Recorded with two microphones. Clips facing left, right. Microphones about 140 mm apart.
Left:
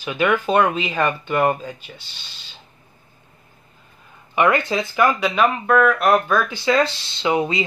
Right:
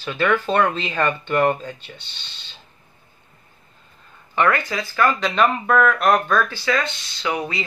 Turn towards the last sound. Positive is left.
turn(degrees=20)  # may be behind; listen again after turning